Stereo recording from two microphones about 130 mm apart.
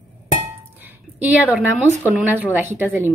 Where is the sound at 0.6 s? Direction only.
15° right (ahead or behind).